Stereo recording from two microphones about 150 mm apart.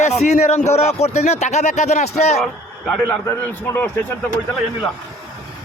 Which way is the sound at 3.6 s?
15° left (ahead or behind).